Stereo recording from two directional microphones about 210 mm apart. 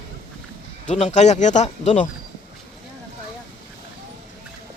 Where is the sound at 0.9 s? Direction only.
35° left (ahead or behind).